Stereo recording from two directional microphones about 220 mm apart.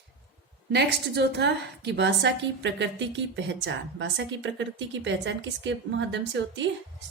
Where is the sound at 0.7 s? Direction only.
50° right (ahead or behind).